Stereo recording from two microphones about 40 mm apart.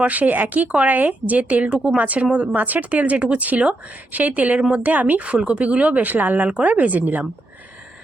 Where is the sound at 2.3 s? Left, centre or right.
Right.